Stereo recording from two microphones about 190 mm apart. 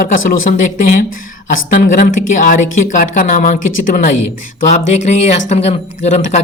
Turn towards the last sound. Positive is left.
turn(degrees=35)  # may be behind; listen again after turning